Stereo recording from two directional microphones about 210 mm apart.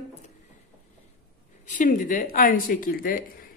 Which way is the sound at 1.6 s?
35° left (ahead or behind).